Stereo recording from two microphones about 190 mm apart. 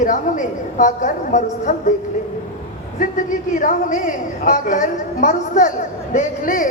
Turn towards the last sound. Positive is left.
turn(degrees=45)  # may be behind; listen again after turning